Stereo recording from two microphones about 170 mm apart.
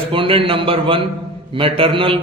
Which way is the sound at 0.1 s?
30° right (ahead or behind).